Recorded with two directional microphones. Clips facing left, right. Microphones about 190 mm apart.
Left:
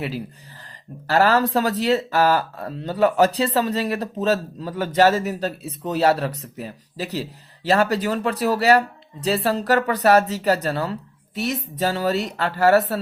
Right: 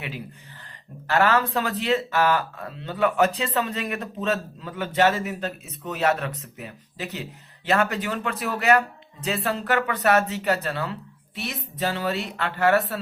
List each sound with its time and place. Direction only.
1.0 s speech: 35° left (ahead or behind)